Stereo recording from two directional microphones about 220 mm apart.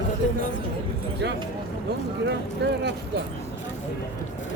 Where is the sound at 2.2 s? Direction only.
50° right (ahead or behind).